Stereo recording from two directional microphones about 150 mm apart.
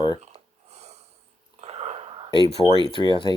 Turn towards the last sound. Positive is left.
turn(degrees=30)  # may be behind; listen again after turning